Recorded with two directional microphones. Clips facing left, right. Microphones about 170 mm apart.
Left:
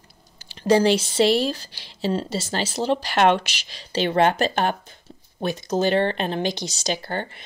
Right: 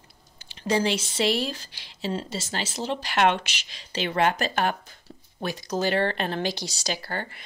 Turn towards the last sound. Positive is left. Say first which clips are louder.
# left 4 dB
turn(degrees=25)  # may be behind; listen again after turning